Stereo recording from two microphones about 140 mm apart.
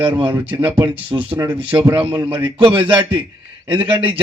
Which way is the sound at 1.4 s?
35° right (ahead or behind).